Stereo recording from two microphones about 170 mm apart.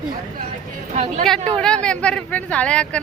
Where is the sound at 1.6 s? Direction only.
5° left (ahead or behind).